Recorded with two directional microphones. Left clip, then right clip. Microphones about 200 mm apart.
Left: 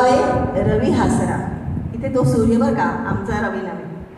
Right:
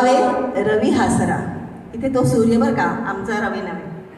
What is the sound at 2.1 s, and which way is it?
A woman's voice, 45° right (ahead or behind).